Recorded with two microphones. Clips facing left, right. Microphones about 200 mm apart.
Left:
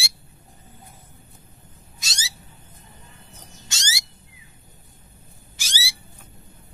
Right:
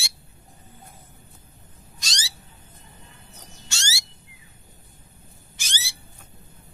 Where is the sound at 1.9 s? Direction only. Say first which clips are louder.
Right 1 dB; 5° left (ahead or behind).